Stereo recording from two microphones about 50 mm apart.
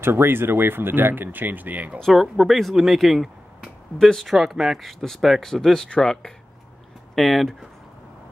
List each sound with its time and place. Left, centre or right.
0.0 s speech: right
2.1 s speech: centre
7.2 s speech: centre